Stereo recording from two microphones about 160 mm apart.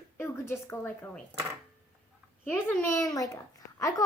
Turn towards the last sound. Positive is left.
turn(degrees=20)  # may be behind; listen again after turning